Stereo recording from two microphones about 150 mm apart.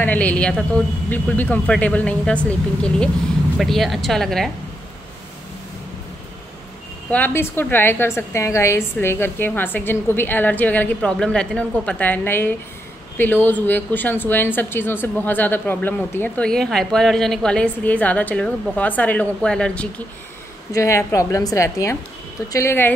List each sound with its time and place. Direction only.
0.0 s speech: 10° left (ahead or behind)
7.1 s speech: 10° left (ahead or behind)
20.7 s a woman's voice: 20° left (ahead or behind)